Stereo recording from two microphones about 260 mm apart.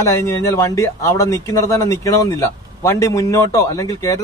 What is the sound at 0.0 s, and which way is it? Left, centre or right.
Speech, centre.